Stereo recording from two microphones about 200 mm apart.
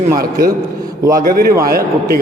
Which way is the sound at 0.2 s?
45° right (ahead or behind).